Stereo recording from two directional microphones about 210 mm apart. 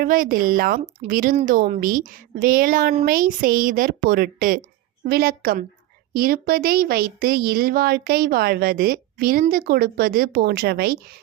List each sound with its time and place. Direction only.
0.0 s a woman's voice: 40° right (ahead or behind)